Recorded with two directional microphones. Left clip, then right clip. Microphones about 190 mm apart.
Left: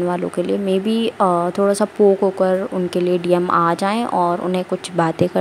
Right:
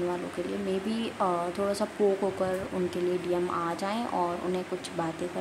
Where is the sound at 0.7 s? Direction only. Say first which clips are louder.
Left 13 dB; 35° left (ahead or behind).